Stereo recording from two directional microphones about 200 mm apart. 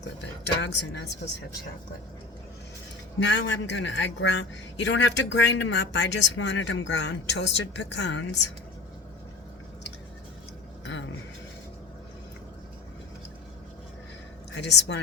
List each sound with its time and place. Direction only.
0.6 s speech: 60° left (ahead or behind)
3.2 s speech: 65° left (ahead or behind)
14.7 s speech: 60° left (ahead or behind)